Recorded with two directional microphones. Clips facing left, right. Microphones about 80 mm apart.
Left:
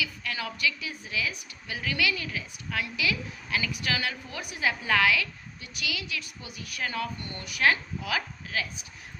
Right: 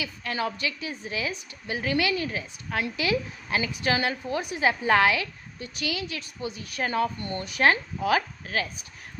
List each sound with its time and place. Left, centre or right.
0.0 s a woman's voice: right